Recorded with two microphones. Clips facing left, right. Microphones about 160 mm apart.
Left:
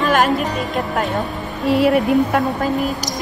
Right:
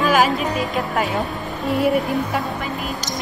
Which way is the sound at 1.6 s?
90° left.